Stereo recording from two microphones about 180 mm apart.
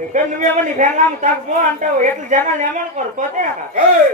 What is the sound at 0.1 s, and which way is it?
A woman's voice, 45° right (ahead or behind).